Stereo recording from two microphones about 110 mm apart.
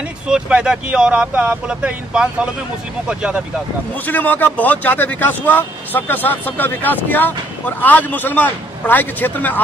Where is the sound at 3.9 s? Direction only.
15° left (ahead or behind).